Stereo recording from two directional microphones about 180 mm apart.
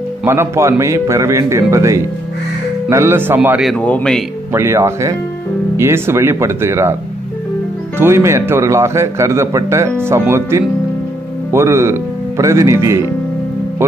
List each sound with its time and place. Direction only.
0.2 s a man's voice: 15° right (ahead or behind)
3.7 s a man's voice: 5° left (ahead or behind)
4.5 s a man's voice: 15° right (ahead or behind)
8.0 s a man's voice: 15° right (ahead or behind)